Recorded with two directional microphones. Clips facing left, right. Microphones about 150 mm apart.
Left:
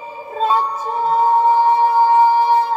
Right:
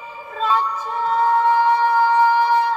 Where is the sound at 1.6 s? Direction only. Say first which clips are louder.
Left 3 dB; 45° left (ahead or behind).